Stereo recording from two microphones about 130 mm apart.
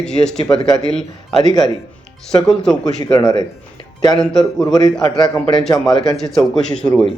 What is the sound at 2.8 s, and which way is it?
Speech, 35° left (ahead or behind).